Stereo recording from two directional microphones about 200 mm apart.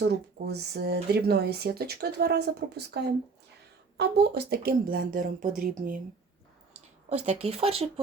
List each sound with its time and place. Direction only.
0.0 s speech: 55° right (ahead or behind)
7.4 s speech: 30° right (ahead or behind)